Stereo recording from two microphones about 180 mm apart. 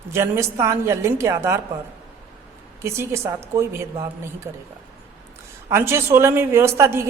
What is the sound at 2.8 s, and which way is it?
A woman's voice, 15° right (ahead or behind).